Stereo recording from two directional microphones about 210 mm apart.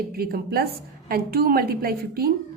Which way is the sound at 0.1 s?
45° right (ahead or behind).